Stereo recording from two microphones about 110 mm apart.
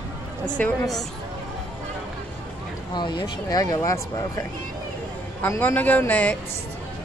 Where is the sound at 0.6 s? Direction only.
15° left (ahead or behind).